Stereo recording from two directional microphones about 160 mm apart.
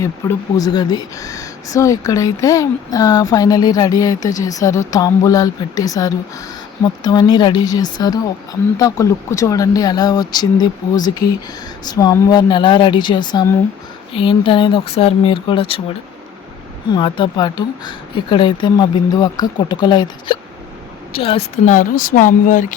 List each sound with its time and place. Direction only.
0.0 s speech: 20° left (ahead or behind)
16.9 s speech: 30° left (ahead or behind)
21.7 s speech: 55° left (ahead or behind)